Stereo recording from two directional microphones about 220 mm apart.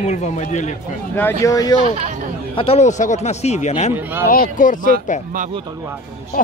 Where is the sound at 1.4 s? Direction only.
15° left (ahead or behind).